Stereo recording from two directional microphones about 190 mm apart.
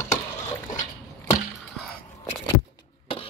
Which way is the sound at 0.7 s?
40° left (ahead or behind).